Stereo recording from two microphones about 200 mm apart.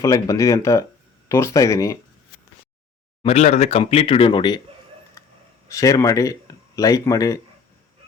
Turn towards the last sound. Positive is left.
turn(degrees=15)  # may be behind; listen again after turning